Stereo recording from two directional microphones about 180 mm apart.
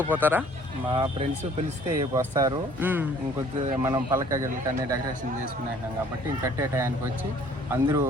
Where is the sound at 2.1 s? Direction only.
20° right (ahead or behind).